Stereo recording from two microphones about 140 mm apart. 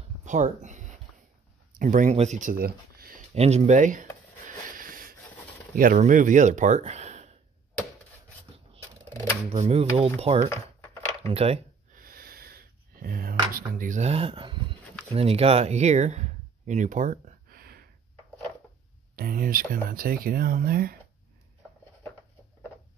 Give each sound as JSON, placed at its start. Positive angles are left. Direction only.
{"t": 0.2, "sound": "a sound", "side_deg": -60}
{"t": 1.8, "sound": "speech", "side_deg": -70}
{"t": 2.1, "sound": "speech", "side_deg": -60}
{"t": 3.3, "sound": "speech", "side_deg": -50}
{"t": 4.5, "sound": "a sound", "side_deg": -75}
{"t": 5.8, "sound": "speech", "side_deg": -70}
{"t": 9.5, "sound": "speech", "side_deg": -50}
{"t": 11.9, "sound": "a sound", "side_deg": -90}
{"t": 15.1, "sound": "speech", "side_deg": -45}
{"t": 19.1, "sound": "speech", "side_deg": -90}